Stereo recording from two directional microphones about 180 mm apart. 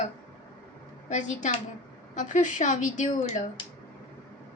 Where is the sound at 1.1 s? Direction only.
40° left (ahead or behind).